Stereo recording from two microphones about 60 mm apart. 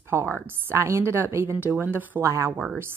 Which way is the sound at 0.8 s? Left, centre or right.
Right.